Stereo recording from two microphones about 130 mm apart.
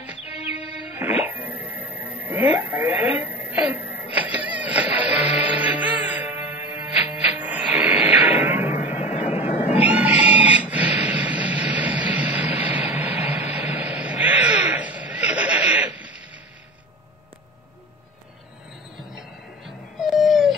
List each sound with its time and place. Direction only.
0.7 s music: 10° right (ahead or behind)
2.2 s radio: 15° right (ahead or behind)
7.3 s music: 10° right (ahead or behind)
8.4 s a sound: 15° right (ahead or behind)
8.9 s vehicle: 60° left (ahead or behind)
9.8 s a sound: 10° right (ahead or behind)
19.1 s music: centre (ahead or behind)